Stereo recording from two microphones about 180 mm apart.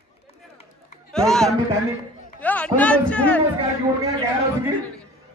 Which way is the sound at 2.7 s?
5° left (ahead or behind).